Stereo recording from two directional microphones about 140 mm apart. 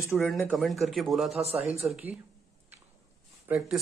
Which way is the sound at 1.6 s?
45° right (ahead or behind).